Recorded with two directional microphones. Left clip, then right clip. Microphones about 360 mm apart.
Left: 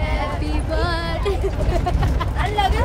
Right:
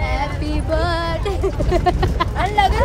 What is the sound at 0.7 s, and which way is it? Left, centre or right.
Music, centre.